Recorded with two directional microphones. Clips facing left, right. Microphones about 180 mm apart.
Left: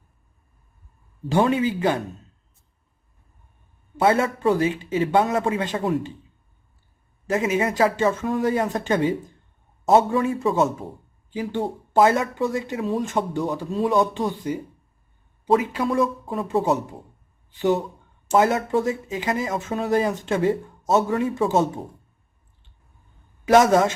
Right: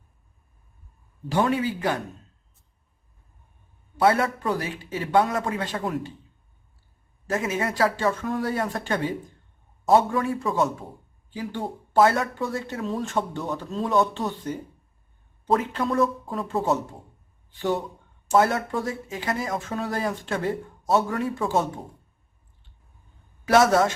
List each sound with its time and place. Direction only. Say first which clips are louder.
1.3 s speech: left 3 dB; 25° left (ahead or behind)
3.9 s speech: left 1 dB; 25° left (ahead or behind)
7.3 s speech: left 4 dB; 20° left (ahead or behind)
18.3 s speech: left 2 dB; 15° left (ahead or behind)
23.5 s speech: left 3 dB; 20° left (ahead or behind)